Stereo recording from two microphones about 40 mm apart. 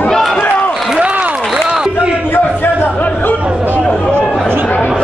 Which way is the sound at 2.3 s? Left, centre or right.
Left.